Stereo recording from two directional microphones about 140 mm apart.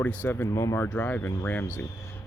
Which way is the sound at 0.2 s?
15° left (ahead or behind).